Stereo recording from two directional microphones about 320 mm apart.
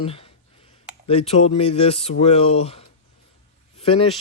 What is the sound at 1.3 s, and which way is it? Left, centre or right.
Speech, centre.